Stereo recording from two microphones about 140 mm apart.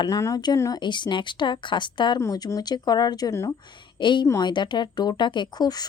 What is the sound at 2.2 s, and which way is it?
Speech, 20° left (ahead or behind).